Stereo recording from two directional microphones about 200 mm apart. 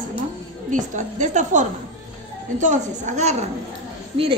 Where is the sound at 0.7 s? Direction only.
40° right (ahead or behind).